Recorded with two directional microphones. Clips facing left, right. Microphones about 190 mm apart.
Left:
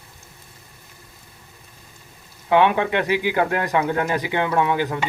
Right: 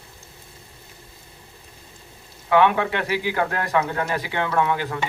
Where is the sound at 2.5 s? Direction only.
20° left (ahead or behind).